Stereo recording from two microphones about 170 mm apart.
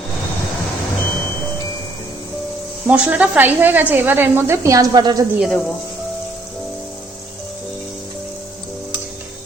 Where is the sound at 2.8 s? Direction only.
10° right (ahead or behind); by 5.2 s 25° right (ahead or behind).